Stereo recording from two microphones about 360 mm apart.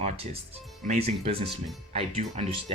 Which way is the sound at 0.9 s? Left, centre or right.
Centre.